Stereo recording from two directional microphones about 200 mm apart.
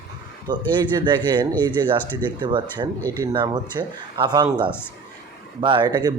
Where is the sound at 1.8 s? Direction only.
20° right (ahead or behind).